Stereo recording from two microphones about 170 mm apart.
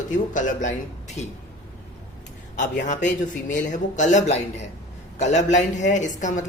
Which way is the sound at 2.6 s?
45° left (ahead or behind).